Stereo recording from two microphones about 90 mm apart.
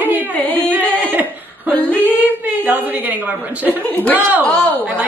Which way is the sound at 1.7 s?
20° left (ahead or behind).